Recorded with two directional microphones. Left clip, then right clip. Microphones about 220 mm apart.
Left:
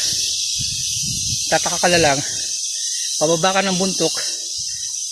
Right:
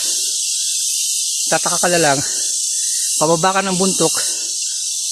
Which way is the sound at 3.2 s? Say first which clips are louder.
Right 2 dB; 35° right (ahead or behind).